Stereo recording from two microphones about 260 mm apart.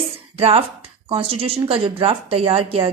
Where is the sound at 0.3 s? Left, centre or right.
Right.